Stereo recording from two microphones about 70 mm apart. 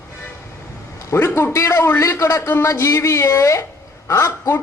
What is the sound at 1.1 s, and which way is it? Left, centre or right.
A man's voice, left.